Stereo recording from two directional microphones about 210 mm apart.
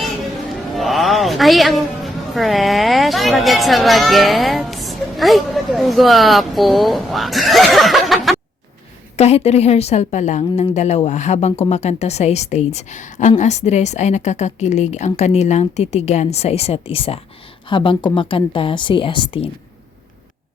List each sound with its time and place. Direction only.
0.7 s a woman's voice: centre (ahead or behind)
9.1 s a woman's voice: 30° left (ahead or behind)